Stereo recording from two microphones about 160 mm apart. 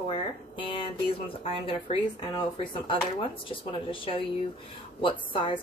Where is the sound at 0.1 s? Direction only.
30° left (ahead or behind).